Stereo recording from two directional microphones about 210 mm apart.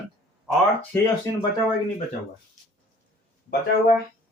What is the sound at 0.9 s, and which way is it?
Speech, 10° left (ahead or behind).